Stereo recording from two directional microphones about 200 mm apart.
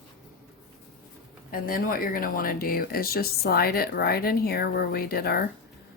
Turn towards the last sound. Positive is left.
turn(degrees=50)  # may be behind; listen again after turning